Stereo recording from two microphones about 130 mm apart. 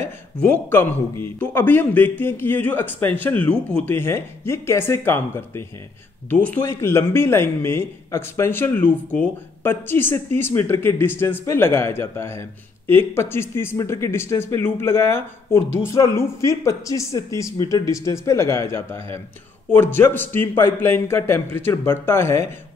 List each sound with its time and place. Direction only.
0.0 s speech: 15° left (ahead or behind)